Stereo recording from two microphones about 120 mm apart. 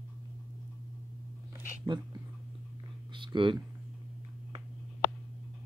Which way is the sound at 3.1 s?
45° right (ahead or behind).